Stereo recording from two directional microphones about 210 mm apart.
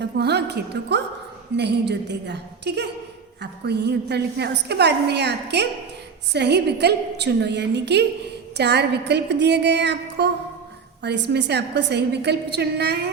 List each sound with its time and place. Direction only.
0.0 s a woman's voice: 50° right (ahead or behind)